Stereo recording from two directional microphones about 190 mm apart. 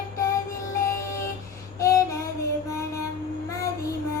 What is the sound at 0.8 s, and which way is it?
Music, 15° left (ahead or behind).